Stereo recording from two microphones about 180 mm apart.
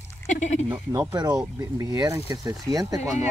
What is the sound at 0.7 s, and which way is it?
Speech, 20° right (ahead or behind).